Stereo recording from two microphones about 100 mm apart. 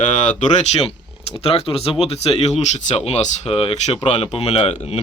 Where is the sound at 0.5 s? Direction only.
90° left.